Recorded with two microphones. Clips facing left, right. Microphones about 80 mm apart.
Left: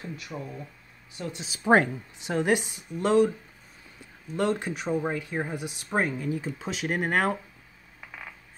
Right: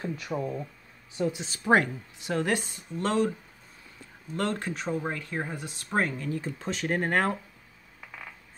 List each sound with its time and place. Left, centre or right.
0.0 s speech: right
1.6 s speech: left
4.4 s speech: centre